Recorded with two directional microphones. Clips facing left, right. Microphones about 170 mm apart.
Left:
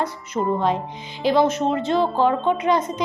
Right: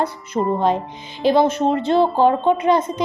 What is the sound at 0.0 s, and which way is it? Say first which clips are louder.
Music: right 3 dB; 30° right (ahead or behind).